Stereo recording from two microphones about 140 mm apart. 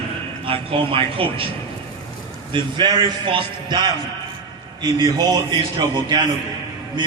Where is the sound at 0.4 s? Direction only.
40° right (ahead or behind).